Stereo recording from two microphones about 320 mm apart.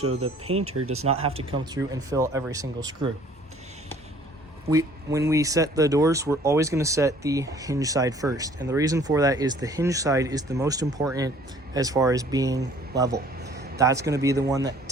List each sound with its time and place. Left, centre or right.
0.2 s speech: centre
0.8 s speech: right
1.4 s speech: centre
4.7 s speech: centre
13.1 s a sound: right
13.7 s speech: centre